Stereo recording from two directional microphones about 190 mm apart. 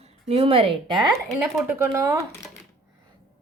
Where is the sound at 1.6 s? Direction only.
15° right (ahead or behind).